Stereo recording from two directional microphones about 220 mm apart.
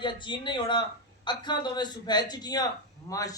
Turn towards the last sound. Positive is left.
turn(degrees=15)  # may be behind; listen again after turning